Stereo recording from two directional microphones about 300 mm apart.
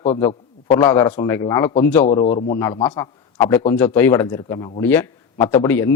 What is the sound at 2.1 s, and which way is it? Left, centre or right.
Speech, left.